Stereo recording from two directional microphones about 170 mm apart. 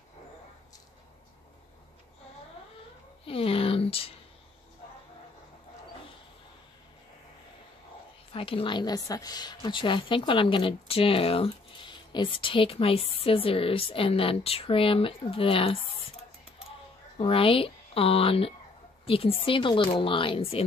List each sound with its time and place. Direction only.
3.3 s a sound: 35° left (ahead or behind)
8.3 s a woman's voice: 35° left (ahead or behind)
17.2 s a woman's voice: 30° left (ahead or behind)